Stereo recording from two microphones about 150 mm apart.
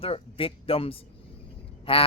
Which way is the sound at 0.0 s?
40° left (ahead or behind).